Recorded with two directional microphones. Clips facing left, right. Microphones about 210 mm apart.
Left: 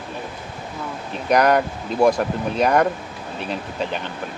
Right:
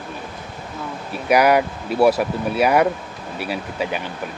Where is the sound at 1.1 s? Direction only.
10° right (ahead or behind).